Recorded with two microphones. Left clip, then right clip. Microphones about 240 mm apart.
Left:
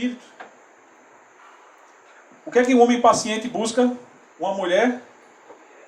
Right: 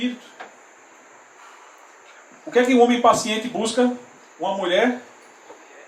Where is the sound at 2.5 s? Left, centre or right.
Centre.